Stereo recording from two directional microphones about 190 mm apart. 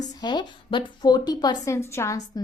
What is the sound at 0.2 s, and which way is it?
A woman's voice, 25° left (ahead or behind).